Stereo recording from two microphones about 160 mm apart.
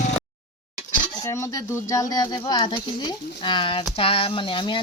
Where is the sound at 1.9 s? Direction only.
20° left (ahead or behind).